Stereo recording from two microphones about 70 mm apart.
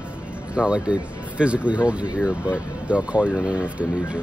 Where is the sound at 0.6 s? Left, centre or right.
Centre.